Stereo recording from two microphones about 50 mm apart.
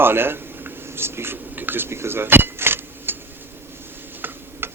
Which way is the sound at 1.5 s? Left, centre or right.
Right.